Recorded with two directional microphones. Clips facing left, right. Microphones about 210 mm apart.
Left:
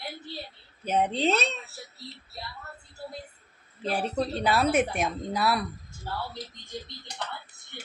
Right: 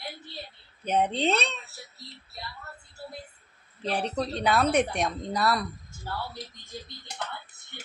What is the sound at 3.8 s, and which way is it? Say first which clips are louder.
Speech: left 1 dB; 5° left (ahead or behind).